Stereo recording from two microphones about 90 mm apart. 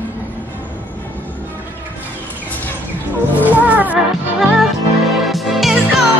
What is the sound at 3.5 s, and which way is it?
Music, 20° right (ahead or behind).